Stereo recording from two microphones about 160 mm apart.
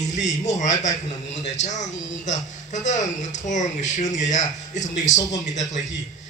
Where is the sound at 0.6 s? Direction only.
50° left (ahead or behind).